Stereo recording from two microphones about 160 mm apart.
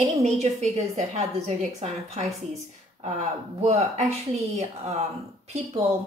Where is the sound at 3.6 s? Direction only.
45° right (ahead or behind).